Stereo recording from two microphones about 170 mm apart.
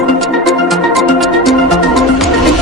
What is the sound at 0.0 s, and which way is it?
Music, centre (ahead or behind).